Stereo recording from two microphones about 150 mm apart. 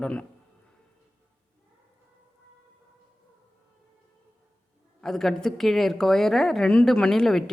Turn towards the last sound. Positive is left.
turn(degrees=5)  # may be behind; listen again after turning